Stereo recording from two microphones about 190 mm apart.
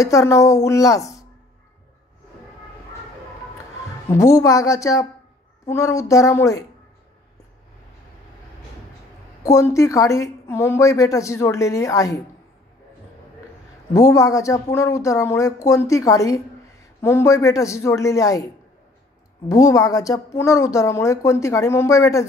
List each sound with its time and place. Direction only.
0.0 s a woman's voice: 15° left (ahead or behind)
4.1 s a woman's voice: 15° left (ahead or behind)
9.4 s a woman's voice: 15° left (ahead or behind)
13.9 s a woman's voice: 15° left (ahead or behind)